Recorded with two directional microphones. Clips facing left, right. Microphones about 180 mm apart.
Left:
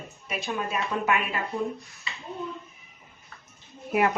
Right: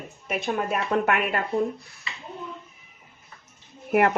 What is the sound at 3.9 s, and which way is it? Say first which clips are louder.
Speech: right 3 dB; 60° right (ahead or behind).